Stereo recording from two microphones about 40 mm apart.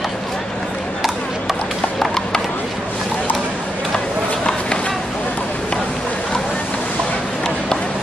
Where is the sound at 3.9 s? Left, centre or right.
Left.